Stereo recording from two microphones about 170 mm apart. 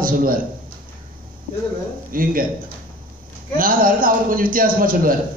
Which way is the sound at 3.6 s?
55° right (ahead or behind).